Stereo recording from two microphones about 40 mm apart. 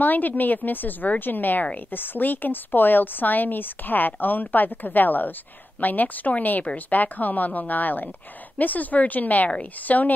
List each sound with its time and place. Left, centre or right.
0.0 s a woman's voice: left